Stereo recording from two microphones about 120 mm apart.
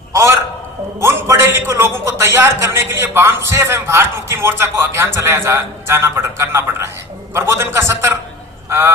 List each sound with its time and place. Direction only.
0.1 s a man's voice: 25° right (ahead or behind)